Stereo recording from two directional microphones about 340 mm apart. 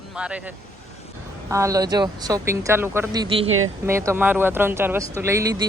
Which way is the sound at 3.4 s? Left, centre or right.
Right.